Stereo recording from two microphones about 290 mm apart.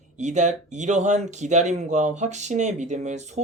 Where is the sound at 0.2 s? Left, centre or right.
Right.